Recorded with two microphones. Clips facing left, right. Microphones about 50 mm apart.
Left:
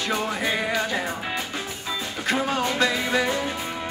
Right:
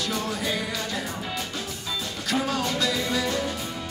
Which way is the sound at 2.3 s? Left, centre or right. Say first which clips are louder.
Left 2 dB; left.